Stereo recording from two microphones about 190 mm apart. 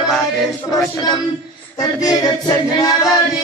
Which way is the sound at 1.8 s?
20° left (ahead or behind).